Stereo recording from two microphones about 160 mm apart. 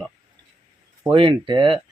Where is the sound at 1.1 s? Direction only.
30° right (ahead or behind).